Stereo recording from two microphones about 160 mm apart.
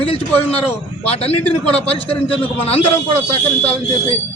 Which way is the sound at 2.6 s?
40° left (ahead or behind).